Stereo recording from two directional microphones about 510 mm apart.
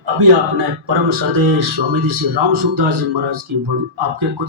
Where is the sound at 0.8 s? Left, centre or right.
Right.